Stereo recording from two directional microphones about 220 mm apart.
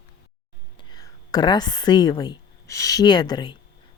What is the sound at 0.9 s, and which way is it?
A woman's voice, 20° left (ahead or behind).